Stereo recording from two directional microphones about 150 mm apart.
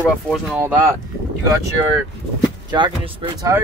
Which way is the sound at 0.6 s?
15° right (ahead or behind).